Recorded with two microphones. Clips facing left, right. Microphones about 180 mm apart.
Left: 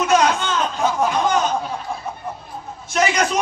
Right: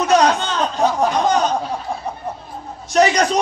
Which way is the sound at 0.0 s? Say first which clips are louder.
Right 2 dB; 35° right (ahead or behind).